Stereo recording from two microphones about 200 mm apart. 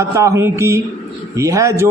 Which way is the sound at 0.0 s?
15° right (ahead or behind).